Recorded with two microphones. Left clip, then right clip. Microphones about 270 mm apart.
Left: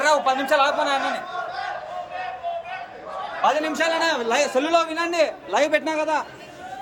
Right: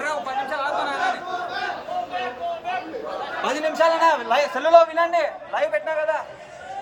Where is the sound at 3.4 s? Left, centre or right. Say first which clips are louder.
Even; centre; by 6.1 s left.